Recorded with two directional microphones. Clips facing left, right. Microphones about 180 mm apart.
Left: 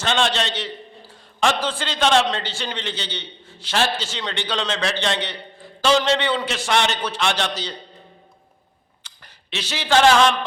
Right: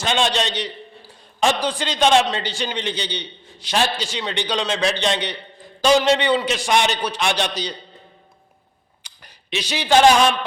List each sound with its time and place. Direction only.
0.0 s a man's voice: 15° right (ahead or behind)
9.0 s speech: 15° right (ahead or behind)